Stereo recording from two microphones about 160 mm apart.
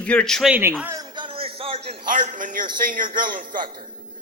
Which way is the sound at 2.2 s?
55° right (ahead or behind).